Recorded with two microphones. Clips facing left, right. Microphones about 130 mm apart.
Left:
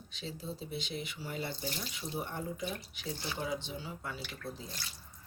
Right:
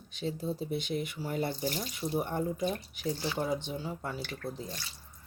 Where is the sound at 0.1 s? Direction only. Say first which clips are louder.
Right 8 dB; 50° right (ahead or behind).